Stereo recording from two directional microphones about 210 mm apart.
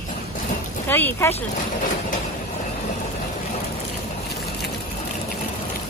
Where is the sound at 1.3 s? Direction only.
40° left (ahead or behind).